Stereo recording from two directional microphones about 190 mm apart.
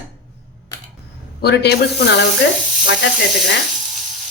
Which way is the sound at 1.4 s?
55° left (ahead or behind).